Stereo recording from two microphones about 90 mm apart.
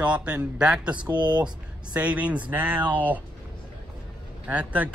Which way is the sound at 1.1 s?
55° right (ahead or behind).